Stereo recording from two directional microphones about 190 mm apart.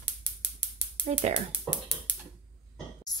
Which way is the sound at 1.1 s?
35° right (ahead or behind).